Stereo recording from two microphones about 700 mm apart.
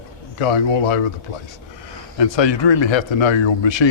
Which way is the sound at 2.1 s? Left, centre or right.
Left.